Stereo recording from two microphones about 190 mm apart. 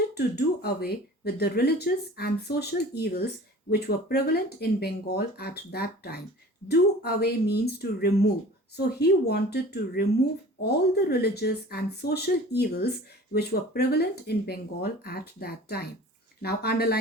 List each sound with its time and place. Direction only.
0.1 s speech: 60° left (ahead or behind)